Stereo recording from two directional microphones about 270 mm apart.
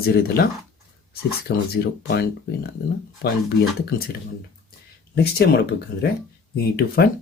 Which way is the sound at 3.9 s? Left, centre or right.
Left.